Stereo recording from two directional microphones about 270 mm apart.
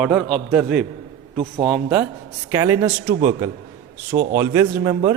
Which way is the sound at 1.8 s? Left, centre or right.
Centre.